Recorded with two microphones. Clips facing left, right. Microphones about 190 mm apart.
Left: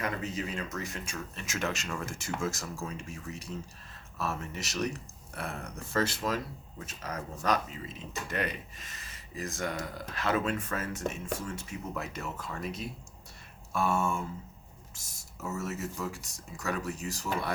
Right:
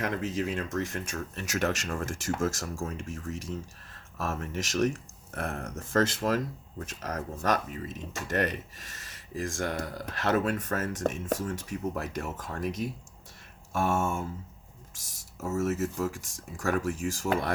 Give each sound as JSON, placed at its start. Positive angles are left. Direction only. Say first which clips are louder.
{"t": 0.3, "sound": "speech", "louder": "right 5 dB", "side_deg": -50}
{"t": 14.9, "sound": "speech", "louder": "left 1 dB", "side_deg": -90}
{"t": 15.4, "sound": "speech", "louder": "right 7 dB", "side_deg": -45}